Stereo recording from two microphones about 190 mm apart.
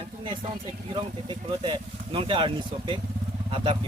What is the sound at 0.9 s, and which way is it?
Speech, 25° right (ahead or behind).